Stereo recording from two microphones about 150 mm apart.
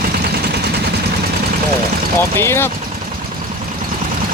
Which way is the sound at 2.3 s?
15° left (ahead or behind).